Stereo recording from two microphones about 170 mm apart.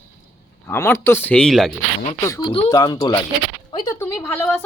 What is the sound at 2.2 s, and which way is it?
Speech, 20° left (ahead or behind).